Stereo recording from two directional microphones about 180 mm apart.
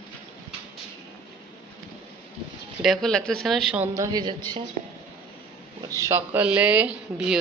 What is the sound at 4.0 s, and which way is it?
Speech, 20° right (ahead or behind).